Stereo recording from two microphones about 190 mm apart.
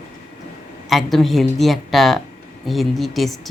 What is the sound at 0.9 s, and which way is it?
Speech, centre (ahead or behind).